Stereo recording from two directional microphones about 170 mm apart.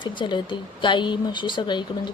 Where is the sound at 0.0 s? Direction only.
30° left (ahead or behind).